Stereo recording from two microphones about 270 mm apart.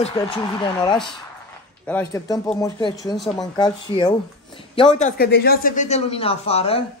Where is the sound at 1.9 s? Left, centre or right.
Centre.